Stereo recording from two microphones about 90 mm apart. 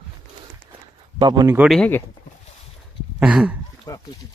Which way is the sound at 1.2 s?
55° right (ahead or behind).